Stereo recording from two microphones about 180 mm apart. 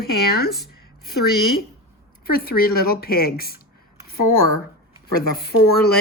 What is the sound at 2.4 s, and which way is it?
Speech, 55° left (ahead or behind).